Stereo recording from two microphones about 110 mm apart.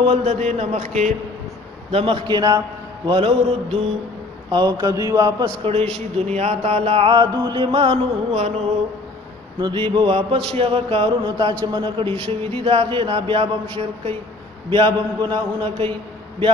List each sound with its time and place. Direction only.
0.0 s mantra: 70° right (ahead or behind); by 1.1 s 90° right
1.9 s speech: 60° right (ahead or behind)
2.2 s a man's voice: 40° right (ahead or behind)
3.1 s speech: 55° right (ahead or behind)
4.5 s a man's voice: 40° right (ahead or behind)
5.4 s speech: 55° right (ahead or behind)
6.1 s a sound: 80° right; by 7.2 s 60° right (ahead or behind)
7.2 s speech: 45° right (ahead or behind); by 8.5 s 60° right (ahead or behind)
9.6 s speech: 45° right (ahead or behind)
14.7 s speech: 45° right (ahead or behind)